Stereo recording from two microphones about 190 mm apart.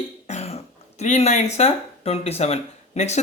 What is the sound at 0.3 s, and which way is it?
Speech, 35° left (ahead or behind).